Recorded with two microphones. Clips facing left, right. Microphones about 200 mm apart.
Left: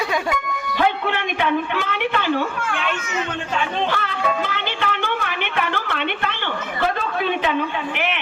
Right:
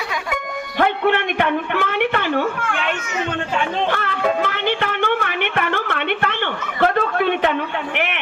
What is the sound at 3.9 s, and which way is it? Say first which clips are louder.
Music: right 3 dB; 55° right (ahead or behind).